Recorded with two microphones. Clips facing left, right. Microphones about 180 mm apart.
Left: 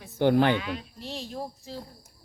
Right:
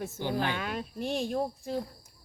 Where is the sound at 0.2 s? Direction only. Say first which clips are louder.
Left 11 dB; 65° left (ahead or behind).